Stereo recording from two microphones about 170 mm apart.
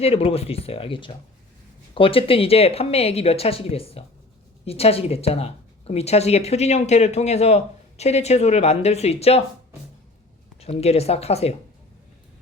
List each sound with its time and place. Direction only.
0.0 s speech: 35° left (ahead or behind)
10.6 s speech: 40° left (ahead or behind)